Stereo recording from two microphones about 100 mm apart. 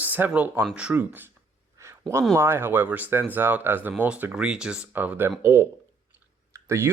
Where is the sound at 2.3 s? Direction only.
25° right (ahead or behind).